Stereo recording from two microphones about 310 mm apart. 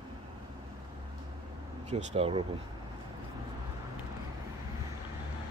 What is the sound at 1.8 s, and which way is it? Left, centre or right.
Speech, right.